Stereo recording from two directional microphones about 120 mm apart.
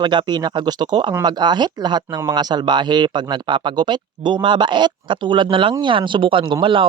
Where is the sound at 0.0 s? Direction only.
40° right (ahead or behind).